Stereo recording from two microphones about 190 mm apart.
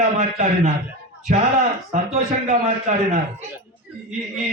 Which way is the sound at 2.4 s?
35° right (ahead or behind).